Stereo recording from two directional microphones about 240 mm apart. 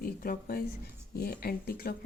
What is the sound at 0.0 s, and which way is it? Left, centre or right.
Speech, left.